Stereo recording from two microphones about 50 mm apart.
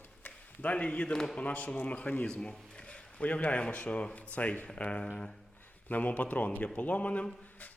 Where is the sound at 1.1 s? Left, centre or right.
Centre.